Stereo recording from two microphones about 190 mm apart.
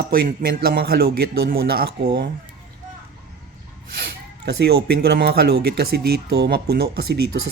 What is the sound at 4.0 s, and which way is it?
Speech, 60° right (ahead or behind).